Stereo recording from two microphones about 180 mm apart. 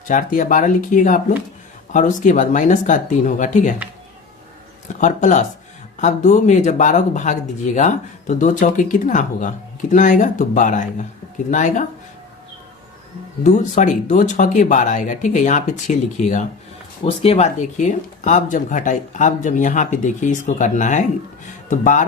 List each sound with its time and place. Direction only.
0.1 s speech: 45° left (ahead or behind)
4.9 s speech: 45° left (ahead or behind)
13.4 s speech: 45° left (ahead or behind)